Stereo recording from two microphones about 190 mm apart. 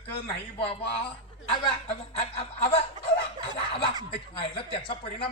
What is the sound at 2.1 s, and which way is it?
A woman's voice, 30° left (ahead or behind).